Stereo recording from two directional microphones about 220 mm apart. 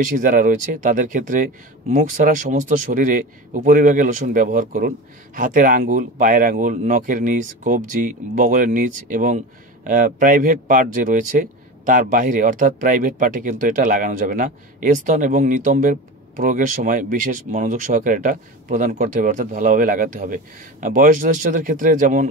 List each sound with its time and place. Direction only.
0.0 s speech: 35° right (ahead or behind)